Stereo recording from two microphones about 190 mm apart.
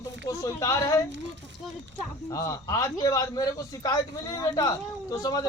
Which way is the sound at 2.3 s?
15° left (ahead or behind).